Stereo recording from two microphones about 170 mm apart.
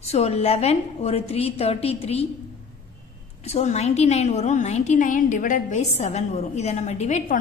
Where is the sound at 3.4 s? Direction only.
40° left (ahead or behind).